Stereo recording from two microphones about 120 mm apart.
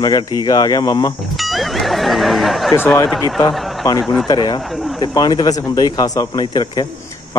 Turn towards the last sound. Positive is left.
turn(degrees=35)  # may be behind; listen again after turning